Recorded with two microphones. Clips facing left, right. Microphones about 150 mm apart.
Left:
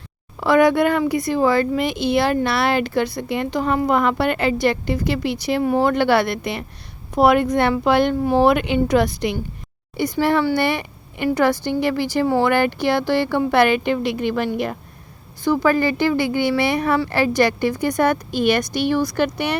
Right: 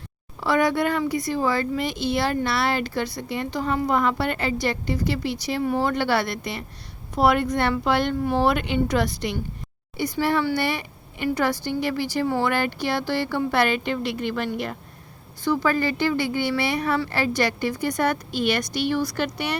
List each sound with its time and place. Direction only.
0.3 s a woman's voice: 55° left (ahead or behind)